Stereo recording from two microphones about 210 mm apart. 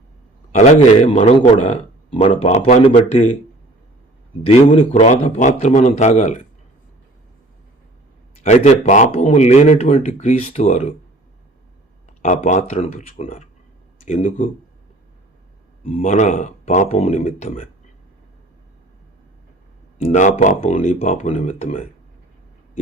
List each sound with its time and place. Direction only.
0.5 s speech: 30° left (ahead or behind)
4.4 s speech: 35° left (ahead or behind)
8.4 s speech: 35° left (ahead or behind)
12.2 s speech: 35° left (ahead or behind)
15.9 s speech: 35° left (ahead or behind)
20.1 s speech: 35° left (ahead or behind)